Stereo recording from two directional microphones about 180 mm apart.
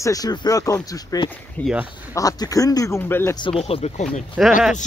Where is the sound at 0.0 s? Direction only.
20° left (ahead or behind).